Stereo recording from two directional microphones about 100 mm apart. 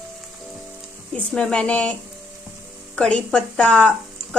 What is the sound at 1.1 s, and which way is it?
Speech, 10° left (ahead or behind).